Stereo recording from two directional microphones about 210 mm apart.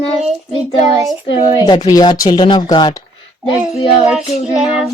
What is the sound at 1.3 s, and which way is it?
Speech, 20° left (ahead or behind).